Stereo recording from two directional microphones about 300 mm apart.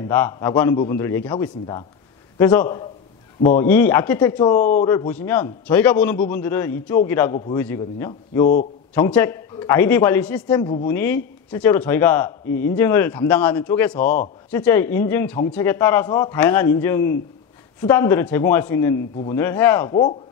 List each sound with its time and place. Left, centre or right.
0.0 s speech: centre
4.6 s speech: left
4.8 s speech: centre